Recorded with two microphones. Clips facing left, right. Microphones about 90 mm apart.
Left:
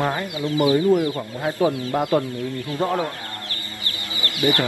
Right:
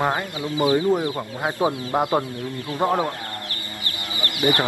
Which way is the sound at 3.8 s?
20° right (ahead or behind).